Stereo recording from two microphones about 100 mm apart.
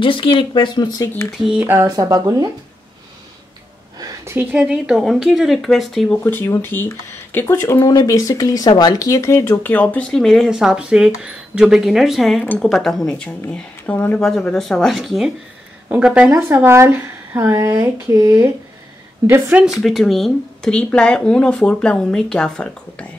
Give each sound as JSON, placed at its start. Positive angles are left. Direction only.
{"t": 0.0, "sound": "speech", "side_deg": 60}
{"t": 0.9, "sound": "speech", "side_deg": 25}
{"t": 1.4, "sound": "a woman's voice", "side_deg": -10}
{"t": 1.7, "sound": "speech", "side_deg": -35}
{"t": 4.0, "sound": "a sound", "side_deg": -25}
{"t": 4.6, "sound": "speech", "side_deg": -5}
{"t": 6.2, "sound": "speech", "side_deg": 25}
{"t": 7.9, "sound": "speech", "side_deg": 35}
{"t": 10.1, "sound": "speech", "side_deg": 5}
{"t": 13.2, "sound": "speech", "side_deg": 15}
{"t": 14.2, "sound": "a woman's voice", "side_deg": 5}
{"t": 16.5, "sound": "speech", "side_deg": -25}
{"t": 19.8, "sound": "speech", "side_deg": 0}